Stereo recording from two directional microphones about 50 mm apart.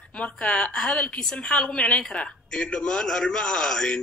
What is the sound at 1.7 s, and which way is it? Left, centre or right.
A man's voice, left.